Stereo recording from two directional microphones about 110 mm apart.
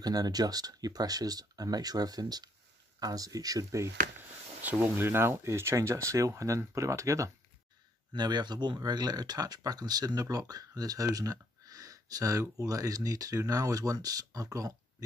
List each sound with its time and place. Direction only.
0.0 s speech: 35° right (ahead or behind)
4.6 s speech: 15° right (ahead or behind)
8.1 s speech: 40° right (ahead or behind)